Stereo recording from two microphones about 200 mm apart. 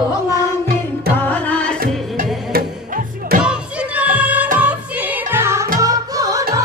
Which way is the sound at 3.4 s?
5° right (ahead or behind).